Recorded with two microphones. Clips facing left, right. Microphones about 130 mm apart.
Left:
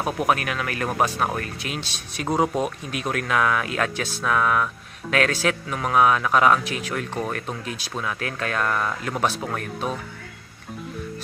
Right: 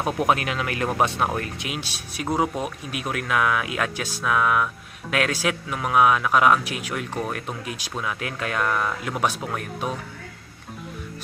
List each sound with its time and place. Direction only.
0.2 s speech: 20° right (ahead or behind)